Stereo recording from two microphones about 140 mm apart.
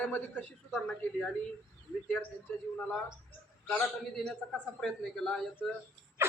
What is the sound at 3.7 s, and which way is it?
A man's voice, 5° left (ahead or behind).